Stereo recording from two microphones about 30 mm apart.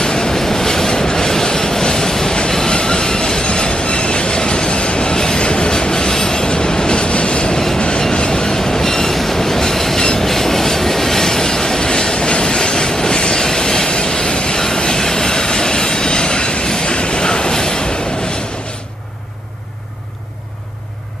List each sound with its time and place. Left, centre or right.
0.0 s train: left